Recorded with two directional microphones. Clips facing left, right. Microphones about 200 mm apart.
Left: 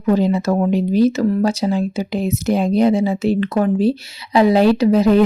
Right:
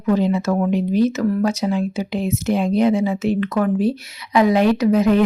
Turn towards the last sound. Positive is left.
turn(degrees=35)  # may be behind; listen again after turning